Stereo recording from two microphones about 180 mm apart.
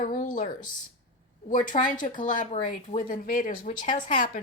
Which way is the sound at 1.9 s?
45° left (ahead or behind).